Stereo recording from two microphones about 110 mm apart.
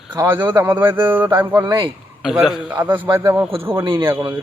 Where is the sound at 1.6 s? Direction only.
45° right (ahead or behind).